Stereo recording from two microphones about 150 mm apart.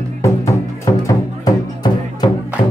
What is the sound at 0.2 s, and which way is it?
Music, 20° left (ahead or behind).